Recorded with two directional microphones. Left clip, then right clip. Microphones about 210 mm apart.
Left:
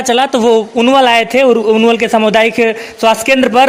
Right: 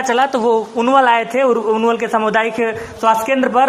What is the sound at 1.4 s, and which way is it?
A man's voice, 45° left (ahead or behind).